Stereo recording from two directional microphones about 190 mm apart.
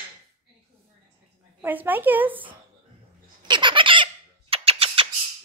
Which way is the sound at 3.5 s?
25° right (ahead or behind).